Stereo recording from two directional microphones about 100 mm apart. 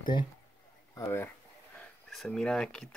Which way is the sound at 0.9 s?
25° left (ahead or behind).